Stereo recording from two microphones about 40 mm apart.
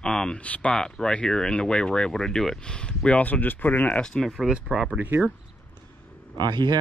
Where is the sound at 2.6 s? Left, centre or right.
Left.